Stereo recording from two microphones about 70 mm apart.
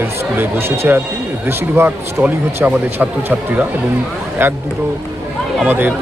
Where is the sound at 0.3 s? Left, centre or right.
Right.